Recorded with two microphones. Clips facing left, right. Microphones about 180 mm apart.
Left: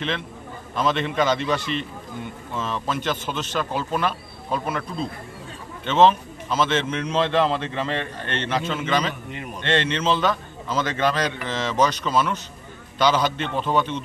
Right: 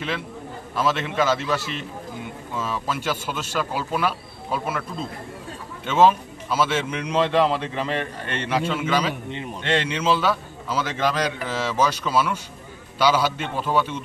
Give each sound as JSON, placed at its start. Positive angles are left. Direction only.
{"t": 0.7, "sound": "a man's voice", "side_deg": -5}
{"t": 9.3, "sound": "a man's voice", "side_deg": -25}
{"t": 9.6, "sound": "a man's voice", "side_deg": -10}